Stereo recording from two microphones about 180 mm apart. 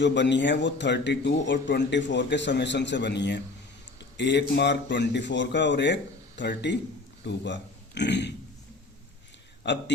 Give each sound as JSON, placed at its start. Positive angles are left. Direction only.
{"t": 0.0, "sound": "a man's voice", "side_deg": 80}
{"t": 9.6, "sound": "speech", "side_deg": 70}